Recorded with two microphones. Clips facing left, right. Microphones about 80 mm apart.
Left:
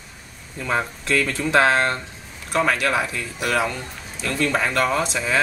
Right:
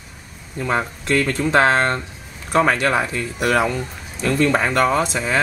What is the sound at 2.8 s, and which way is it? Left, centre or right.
Speech, centre.